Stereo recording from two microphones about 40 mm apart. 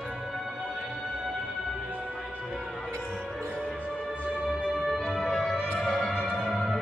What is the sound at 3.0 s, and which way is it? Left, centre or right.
Music, centre.